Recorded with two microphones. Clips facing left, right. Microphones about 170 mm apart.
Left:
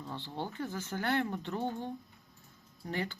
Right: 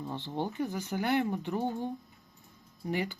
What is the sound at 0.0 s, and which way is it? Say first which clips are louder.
Speech: right 5 dB; 20° right (ahead or behind).